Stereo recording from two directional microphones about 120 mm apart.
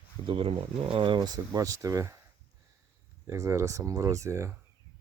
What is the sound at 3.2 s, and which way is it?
Speech, 25° right (ahead or behind).